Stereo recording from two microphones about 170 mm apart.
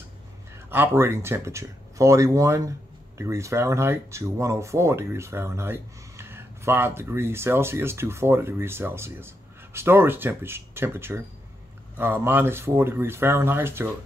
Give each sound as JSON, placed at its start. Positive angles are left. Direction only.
{"t": 0.7, "sound": "speech", "side_deg": -10}